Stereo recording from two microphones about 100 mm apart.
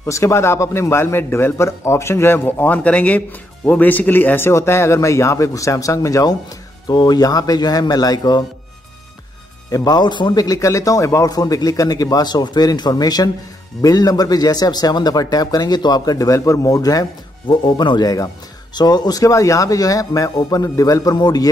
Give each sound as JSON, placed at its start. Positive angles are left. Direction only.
{"t": 0.0, "sound": "a man's voice", "side_deg": 30}
{"t": 9.7, "sound": "a man's voice", "side_deg": 40}
{"t": 17.5, "sound": "a man's voice", "side_deg": 50}